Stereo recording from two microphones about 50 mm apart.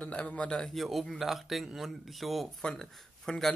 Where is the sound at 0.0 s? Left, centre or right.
Left.